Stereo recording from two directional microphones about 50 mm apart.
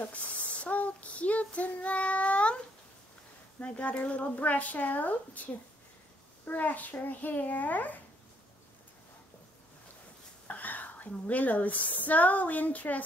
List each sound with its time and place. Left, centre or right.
0.0 s child singing: left
3.6 s speech: left
10.4 s a woman's voice: left